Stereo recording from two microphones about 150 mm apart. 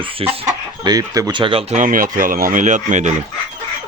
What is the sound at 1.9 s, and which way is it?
Speech, 65° right (ahead or behind).